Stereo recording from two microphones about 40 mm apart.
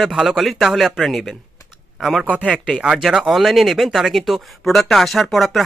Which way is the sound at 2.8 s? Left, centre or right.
Centre.